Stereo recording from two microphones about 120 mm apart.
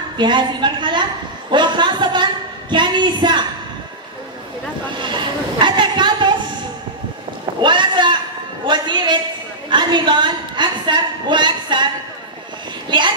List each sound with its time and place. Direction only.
0.2 s a woman's voice: 40° right (ahead or behind)
4.9 s a sound: 40° right (ahead or behind)
7.6 s a woman's voice: 40° right (ahead or behind)